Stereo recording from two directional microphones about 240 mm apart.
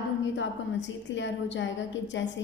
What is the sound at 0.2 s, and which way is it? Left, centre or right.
A woman's voice, left.